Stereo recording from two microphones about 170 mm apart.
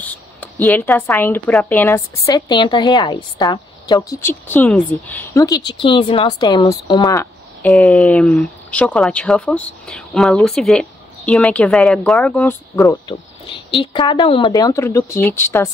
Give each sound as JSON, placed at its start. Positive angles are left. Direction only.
{"t": 0.0, "sound": "speech", "side_deg": 10}
{"t": 4.2, "sound": "speech", "side_deg": 10}
{"t": 7.6, "sound": "speech", "side_deg": 5}
{"t": 13.5, "sound": "speech", "side_deg": 30}